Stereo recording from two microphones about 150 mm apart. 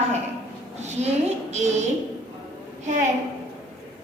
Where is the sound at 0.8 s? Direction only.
50° right (ahead or behind).